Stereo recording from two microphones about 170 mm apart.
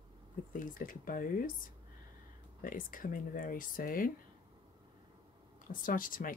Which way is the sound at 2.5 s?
55° left (ahead or behind).